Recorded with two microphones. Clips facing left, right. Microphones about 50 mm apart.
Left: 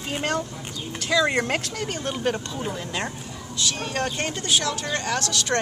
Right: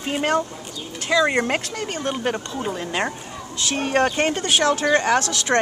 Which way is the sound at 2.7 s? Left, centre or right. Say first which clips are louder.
Right 5 dB; right.